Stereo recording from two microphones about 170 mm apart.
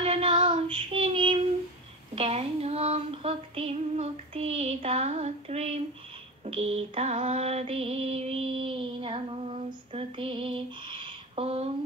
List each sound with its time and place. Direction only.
0.0 s child singing: 35° right (ahead or behind)
2.1 s female singing: 35° right (ahead or behind)